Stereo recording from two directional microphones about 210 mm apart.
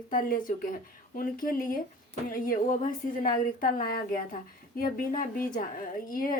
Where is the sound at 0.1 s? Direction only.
40° left (ahead or behind).